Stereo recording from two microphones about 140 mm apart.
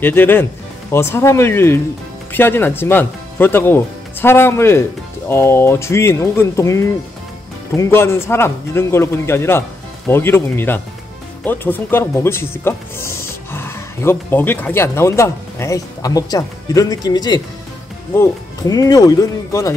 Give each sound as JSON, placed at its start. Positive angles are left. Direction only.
{"t": 0.0, "sound": "speech", "side_deg": 15}